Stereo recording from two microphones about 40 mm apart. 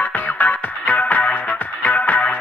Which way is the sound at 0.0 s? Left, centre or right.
Left.